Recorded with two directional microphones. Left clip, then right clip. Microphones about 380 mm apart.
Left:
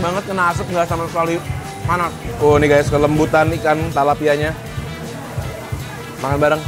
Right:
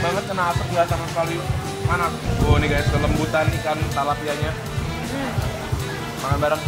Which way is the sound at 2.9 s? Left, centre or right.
Left.